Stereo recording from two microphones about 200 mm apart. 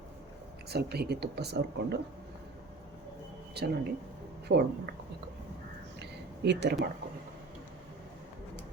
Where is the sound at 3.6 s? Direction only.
55° right (ahead or behind).